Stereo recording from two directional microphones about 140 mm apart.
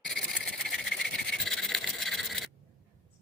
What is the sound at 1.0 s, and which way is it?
Rub, centre (ahead or behind).